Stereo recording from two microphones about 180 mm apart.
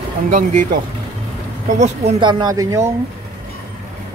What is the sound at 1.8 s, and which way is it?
Speech, 35° right (ahead or behind).